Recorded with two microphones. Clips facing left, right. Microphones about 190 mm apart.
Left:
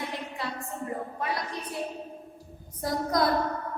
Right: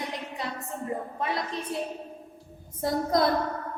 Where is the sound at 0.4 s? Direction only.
20° right (ahead or behind).